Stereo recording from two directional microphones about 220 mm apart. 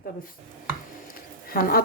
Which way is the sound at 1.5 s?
40° left (ahead or behind).